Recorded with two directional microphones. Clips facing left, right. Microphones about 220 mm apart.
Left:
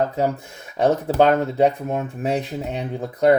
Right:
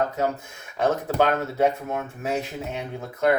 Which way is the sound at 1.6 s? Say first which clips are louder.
Left 2 dB; 35° left (ahead or behind).